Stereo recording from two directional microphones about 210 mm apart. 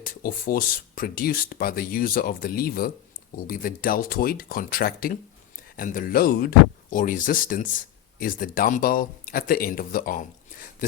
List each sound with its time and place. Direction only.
0.0 s speech: 40° left (ahead or behind)